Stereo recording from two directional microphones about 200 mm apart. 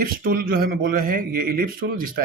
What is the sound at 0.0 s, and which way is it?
Speech, 45° right (ahead or behind).